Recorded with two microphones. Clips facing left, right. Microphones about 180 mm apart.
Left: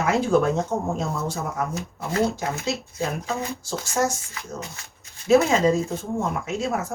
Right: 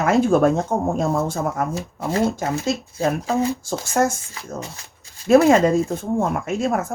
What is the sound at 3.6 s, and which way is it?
Speech, 55° right (ahead or behind).